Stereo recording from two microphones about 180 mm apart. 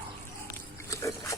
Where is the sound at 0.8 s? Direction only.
15° left (ahead or behind).